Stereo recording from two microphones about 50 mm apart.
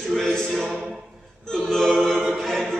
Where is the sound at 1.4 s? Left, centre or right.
Centre.